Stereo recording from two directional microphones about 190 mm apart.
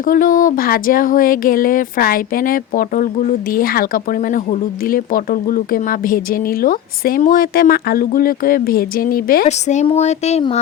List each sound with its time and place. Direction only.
0.0 s speech: 45° left (ahead or behind)
9.5 s speech: 35° left (ahead or behind)